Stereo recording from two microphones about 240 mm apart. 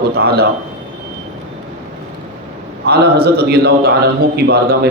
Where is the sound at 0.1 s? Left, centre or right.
Right.